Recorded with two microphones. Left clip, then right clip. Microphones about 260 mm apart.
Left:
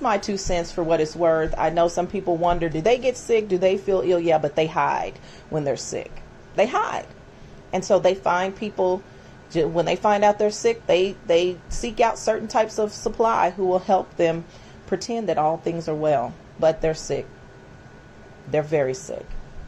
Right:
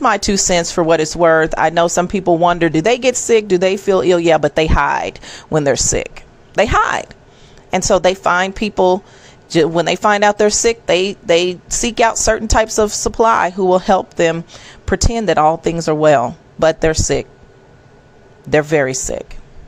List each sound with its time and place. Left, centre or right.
0.0 s a woman's voice: right
18.5 s a woman's voice: right